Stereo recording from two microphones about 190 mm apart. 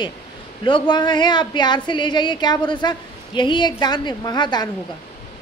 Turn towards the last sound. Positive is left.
turn(degrees=20)  # may be behind; listen again after turning